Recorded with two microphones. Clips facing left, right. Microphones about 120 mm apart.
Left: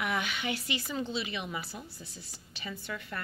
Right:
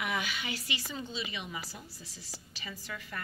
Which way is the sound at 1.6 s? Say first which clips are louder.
Left 3 dB; 90° right.